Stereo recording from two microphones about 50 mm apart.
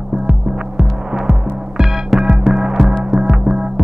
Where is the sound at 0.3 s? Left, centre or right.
Centre.